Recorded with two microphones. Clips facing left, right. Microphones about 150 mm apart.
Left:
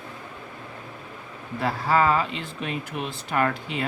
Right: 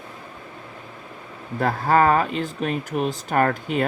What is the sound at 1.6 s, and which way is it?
Speech, 45° right (ahead or behind).